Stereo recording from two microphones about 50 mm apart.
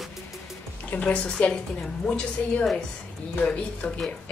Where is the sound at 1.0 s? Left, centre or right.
Left.